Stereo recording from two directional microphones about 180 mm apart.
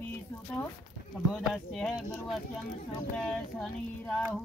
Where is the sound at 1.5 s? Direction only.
Centre (ahead or behind).